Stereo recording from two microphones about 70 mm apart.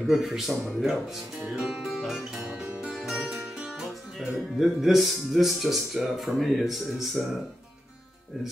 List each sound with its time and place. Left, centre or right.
0.0 s speech: centre
1.6 s music: centre
4.2 s speech: centre